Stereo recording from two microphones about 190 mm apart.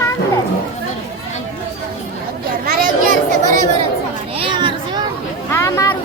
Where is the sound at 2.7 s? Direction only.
45° right (ahead or behind).